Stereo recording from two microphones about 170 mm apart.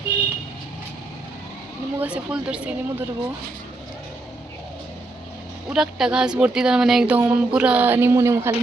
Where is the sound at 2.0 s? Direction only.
5° right (ahead or behind).